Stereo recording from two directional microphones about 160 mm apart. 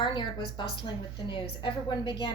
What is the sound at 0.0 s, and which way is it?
A woman's voice, 30° left (ahead or behind).